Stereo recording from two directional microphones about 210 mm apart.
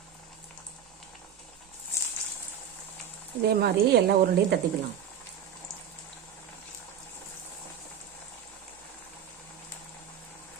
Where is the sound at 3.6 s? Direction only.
50° right (ahead or behind).